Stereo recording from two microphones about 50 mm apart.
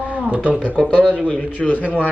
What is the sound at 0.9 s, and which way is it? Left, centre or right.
Speech, left.